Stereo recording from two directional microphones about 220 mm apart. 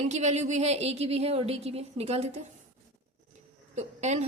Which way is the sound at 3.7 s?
30° right (ahead or behind).